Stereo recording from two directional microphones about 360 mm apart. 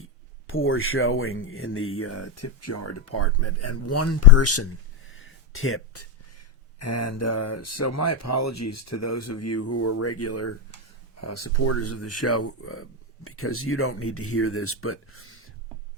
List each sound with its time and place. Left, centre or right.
0.0 s speech: left